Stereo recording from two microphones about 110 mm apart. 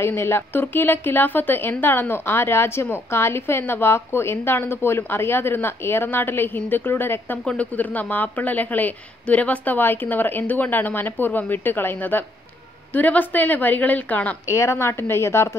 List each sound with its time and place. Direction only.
0.0 s a woman's voice: 20° left (ahead or behind)
14.5 s a woman's voice: 25° left (ahead or behind)